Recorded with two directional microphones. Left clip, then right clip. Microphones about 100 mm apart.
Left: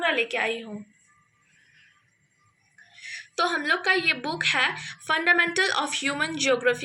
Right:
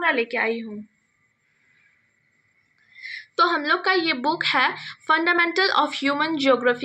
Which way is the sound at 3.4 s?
40° right (ahead or behind).